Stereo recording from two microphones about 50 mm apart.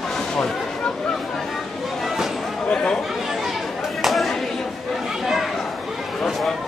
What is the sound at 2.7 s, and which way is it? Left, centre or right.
Chatter, centre.